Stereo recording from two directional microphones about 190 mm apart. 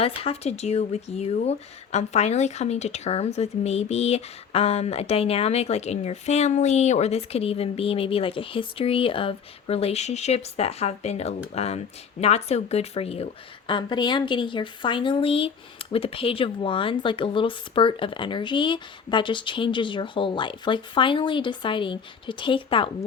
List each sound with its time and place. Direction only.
0.0 s a woman's voice: 30° left (ahead or behind)